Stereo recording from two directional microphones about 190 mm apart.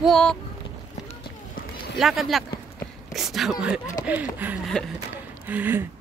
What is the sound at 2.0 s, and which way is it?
Speech, centre (ahead or behind).